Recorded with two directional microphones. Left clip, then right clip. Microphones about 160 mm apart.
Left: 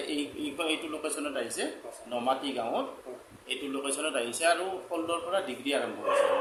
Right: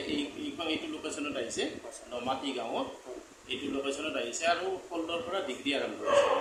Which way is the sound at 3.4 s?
40° left (ahead or behind).